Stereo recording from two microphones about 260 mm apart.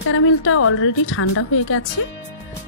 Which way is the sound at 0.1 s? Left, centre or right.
Left.